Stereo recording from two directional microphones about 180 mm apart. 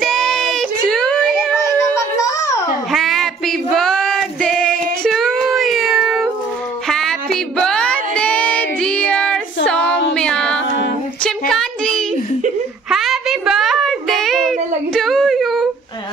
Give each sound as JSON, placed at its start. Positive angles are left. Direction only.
{"t": 0.0, "sound": "child singing", "side_deg": 0}
{"t": 2.1, "sound": "babbling", "side_deg": 20}
{"t": 2.9, "sound": "female singing", "side_deg": 0}
{"t": 6.9, "sound": "a sound", "side_deg": 0}
{"t": 9.7, "sound": "child singing", "side_deg": 5}
{"t": 11.2, "sound": "a sound", "side_deg": 5}